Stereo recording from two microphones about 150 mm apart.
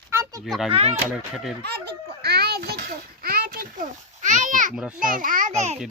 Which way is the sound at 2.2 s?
90° right.